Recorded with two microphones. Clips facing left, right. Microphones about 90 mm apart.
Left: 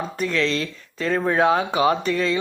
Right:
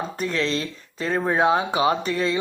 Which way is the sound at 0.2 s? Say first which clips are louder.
Left 3 dB; 30° right (ahead or behind).